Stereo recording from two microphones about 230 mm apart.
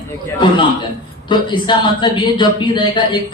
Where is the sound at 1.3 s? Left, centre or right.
Centre.